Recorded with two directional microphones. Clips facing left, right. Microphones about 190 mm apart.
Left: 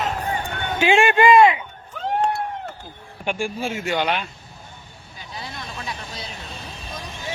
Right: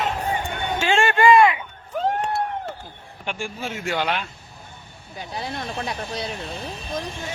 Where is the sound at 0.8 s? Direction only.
15° left (ahead or behind).